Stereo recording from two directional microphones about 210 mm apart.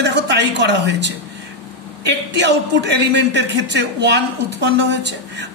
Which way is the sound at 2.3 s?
55° right (ahead or behind).